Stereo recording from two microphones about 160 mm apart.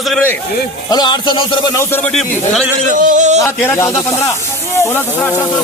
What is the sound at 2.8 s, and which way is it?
Speech, 55° right (ahead or behind).